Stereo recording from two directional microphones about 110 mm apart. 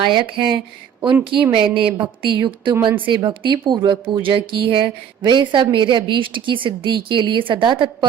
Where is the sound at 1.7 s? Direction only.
50° right (ahead or behind).